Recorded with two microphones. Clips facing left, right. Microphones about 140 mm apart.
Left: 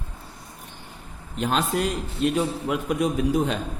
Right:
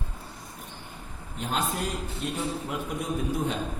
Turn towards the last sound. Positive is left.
turn(degrees=90)